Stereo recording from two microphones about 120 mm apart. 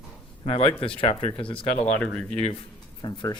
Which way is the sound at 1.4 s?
45° left (ahead or behind).